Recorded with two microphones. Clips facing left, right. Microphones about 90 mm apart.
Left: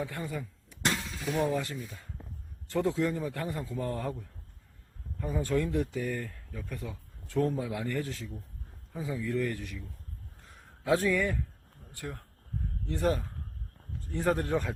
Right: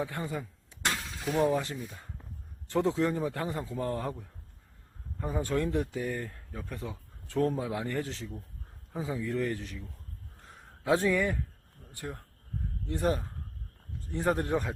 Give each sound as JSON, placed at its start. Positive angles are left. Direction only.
{"t": 0.0, "sound": "a man's voice", "side_deg": -20}
{"t": 5.2, "sound": "a man's voice", "side_deg": -20}
{"t": 10.8, "sound": "a man's voice", "side_deg": -25}